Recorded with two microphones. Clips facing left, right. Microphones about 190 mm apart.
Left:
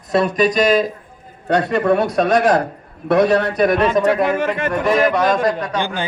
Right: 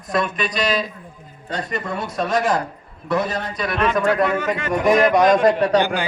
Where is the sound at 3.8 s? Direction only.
25° left (ahead or behind).